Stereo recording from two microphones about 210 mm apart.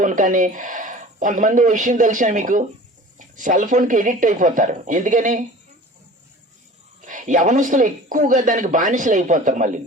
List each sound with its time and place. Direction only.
0.0 s a man's voice: 40° right (ahead or behind)
7.0 s a man's voice: 35° right (ahead or behind)